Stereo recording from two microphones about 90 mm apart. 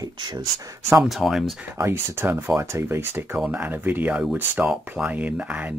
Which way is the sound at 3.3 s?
15° right (ahead or behind).